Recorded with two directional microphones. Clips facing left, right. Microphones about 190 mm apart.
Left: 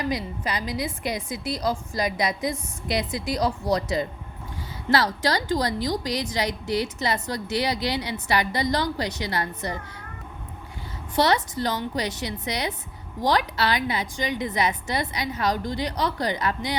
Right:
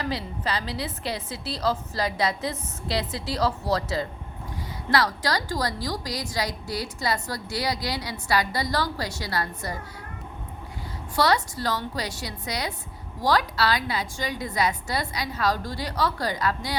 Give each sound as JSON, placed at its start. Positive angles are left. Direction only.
{"t": 0.0, "sound": "a woman's voice", "side_deg": 15}
{"t": 11.1, "sound": "a woman's voice", "side_deg": 20}